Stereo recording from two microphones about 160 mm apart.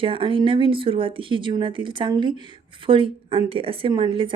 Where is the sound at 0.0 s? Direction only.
35° right (ahead or behind).